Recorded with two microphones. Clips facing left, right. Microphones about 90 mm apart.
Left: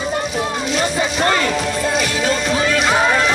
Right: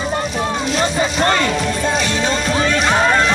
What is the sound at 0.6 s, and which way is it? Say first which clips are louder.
Music: right 2 dB; centre (ahead or behind).